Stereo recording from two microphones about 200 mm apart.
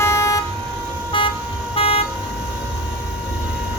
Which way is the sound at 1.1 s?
25° left (ahead or behind).